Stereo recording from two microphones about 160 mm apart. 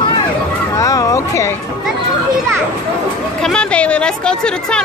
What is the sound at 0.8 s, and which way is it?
Speech, 20° left (ahead or behind).